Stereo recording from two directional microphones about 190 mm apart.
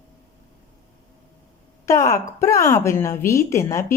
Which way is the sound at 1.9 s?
15° left (ahead or behind).